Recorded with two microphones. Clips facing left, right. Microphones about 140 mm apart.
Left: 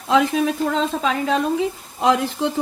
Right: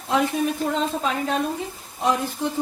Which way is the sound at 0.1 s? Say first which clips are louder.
Left 4 dB; 90° left.